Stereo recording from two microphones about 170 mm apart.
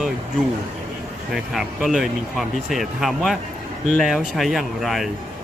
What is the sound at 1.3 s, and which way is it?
Speech, centre (ahead or behind).